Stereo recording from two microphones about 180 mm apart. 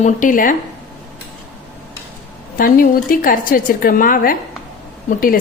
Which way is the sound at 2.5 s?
50° left (ahead or behind).